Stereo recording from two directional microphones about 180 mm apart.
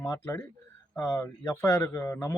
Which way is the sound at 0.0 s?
15° left (ahead or behind).